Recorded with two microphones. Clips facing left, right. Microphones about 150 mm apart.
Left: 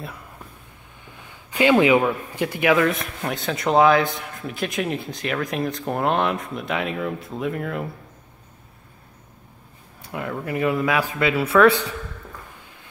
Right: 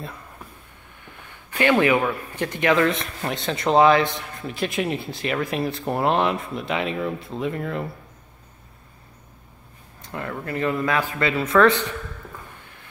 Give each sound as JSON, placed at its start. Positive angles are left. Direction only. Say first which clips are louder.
{"t": 1.0, "sound": "speech", "louder": "even", "side_deg": 15}
{"t": 10.0, "sound": "speech", "louder": "left 2 dB", "side_deg": 10}